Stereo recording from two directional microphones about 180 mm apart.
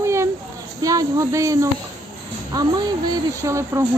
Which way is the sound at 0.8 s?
20° right (ahead or behind).